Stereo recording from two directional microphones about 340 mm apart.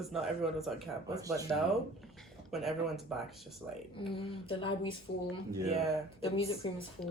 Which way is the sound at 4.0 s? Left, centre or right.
Centre.